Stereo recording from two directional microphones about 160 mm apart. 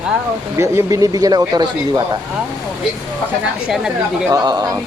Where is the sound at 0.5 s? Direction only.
15° right (ahead or behind).